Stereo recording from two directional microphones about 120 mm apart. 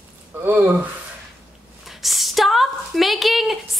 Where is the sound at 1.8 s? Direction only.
Centre (ahead or behind).